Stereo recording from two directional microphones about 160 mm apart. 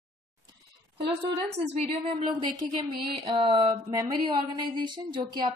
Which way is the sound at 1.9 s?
35° right (ahead or behind).